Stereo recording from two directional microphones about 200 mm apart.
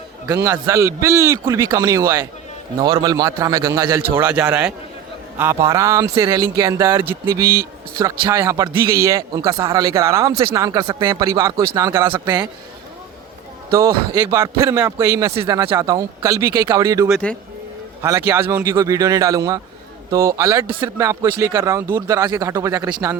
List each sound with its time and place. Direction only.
0.4 s speech: 15° right (ahead or behind)
14.2 s speech: 15° right (ahead or behind)
17.1 s speech: 5° left (ahead or behind)
18.0 s speech: 10° right (ahead or behind)